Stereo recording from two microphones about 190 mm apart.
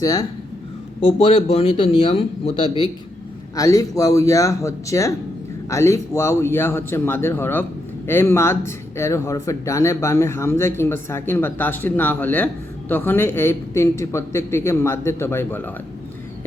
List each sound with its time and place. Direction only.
0.0 s speech: 20° left (ahead or behind)
1.0 s speech: 30° left (ahead or behind)
3.5 s speech: 20° left (ahead or behind)